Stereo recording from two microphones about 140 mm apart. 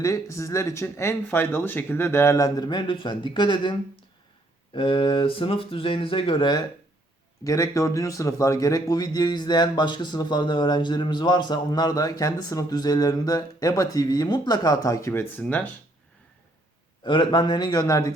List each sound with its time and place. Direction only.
0.0 s a man's voice: 20° left (ahead or behind); by 6.6 s 35° left (ahead or behind)
7.4 s a man's voice: 25° left (ahead or behind)
17.0 s a man's voice: 35° left (ahead or behind)